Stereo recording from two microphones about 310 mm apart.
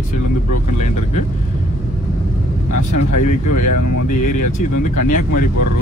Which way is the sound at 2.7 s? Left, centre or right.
Left.